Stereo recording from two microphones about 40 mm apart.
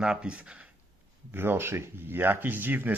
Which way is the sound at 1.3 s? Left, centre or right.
Right.